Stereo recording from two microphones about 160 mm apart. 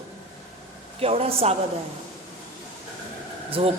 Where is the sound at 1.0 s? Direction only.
40° right (ahead or behind).